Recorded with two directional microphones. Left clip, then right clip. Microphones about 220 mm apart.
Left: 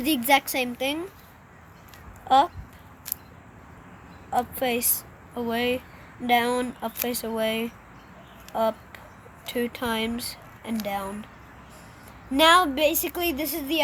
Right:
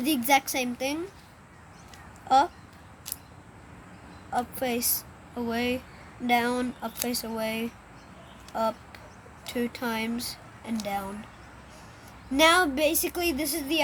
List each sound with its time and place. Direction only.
0.0 s a woman's voice: 15° left (ahead or behind)
2.2 s a child's voice: 20° left (ahead or behind)
4.3 s a woman's voice: 20° left (ahead or behind)
12.3 s a woman's voice: 15° left (ahead or behind)